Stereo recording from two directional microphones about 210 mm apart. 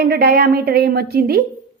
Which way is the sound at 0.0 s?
45° right (ahead or behind).